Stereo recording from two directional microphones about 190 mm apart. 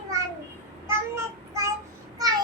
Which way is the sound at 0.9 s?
15° right (ahead or behind).